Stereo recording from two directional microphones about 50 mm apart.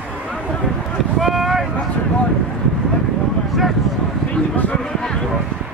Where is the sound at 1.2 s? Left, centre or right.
Centre.